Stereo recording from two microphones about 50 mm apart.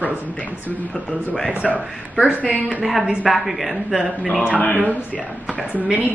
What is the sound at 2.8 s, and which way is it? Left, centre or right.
Speech, centre.